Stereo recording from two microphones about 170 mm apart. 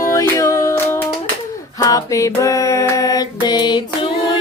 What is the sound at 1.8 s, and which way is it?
Child singing, 20° left (ahead or behind).